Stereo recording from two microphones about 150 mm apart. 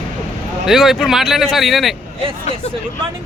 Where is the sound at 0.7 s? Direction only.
5° right (ahead or behind).